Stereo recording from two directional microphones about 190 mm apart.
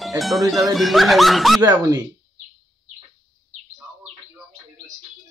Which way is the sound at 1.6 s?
15° right (ahead or behind).